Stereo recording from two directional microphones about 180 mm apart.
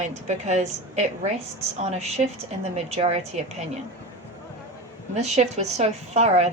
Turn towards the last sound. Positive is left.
turn(degrees=-40)  # may be behind; listen again after turning